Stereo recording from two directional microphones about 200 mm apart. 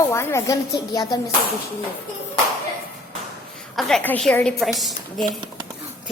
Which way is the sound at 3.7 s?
5° left (ahead or behind).